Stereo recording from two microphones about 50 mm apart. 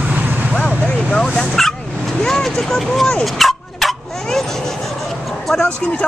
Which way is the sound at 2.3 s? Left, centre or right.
Centre.